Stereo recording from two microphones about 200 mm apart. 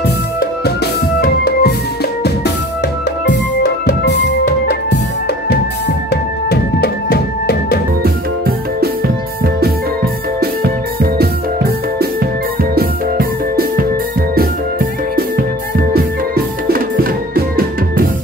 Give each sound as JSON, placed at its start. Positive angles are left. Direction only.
{"t": 1.2, "sound": "music", "side_deg": 50}
{"t": 3.3, "sound": "music", "side_deg": 55}
{"t": 6.5, "sound": "music", "side_deg": 50}
{"t": 8.0, "sound": "music", "side_deg": -50}